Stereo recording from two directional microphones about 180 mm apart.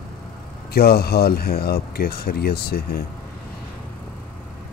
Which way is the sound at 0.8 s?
60° left (ahead or behind).